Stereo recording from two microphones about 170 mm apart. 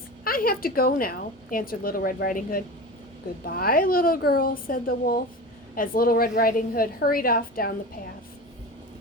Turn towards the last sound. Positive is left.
turn(degrees=60)  # may be behind; listen again after turning